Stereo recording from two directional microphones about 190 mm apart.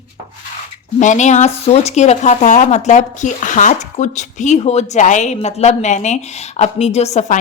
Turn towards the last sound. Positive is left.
turn(degrees=35)  # may be behind; listen again after turning